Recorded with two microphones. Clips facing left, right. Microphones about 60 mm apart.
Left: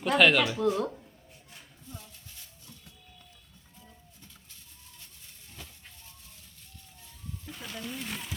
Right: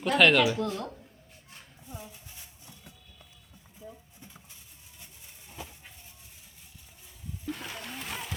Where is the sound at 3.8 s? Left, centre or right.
Centre.